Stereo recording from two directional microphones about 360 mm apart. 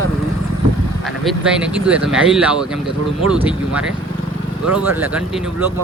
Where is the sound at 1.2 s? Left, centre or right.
Centre.